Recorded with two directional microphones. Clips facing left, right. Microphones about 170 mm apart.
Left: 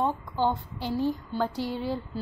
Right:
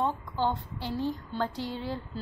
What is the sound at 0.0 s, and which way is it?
A woman's voice, 15° left (ahead or behind).